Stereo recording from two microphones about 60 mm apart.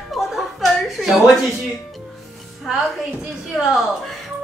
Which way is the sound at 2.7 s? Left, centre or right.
Centre.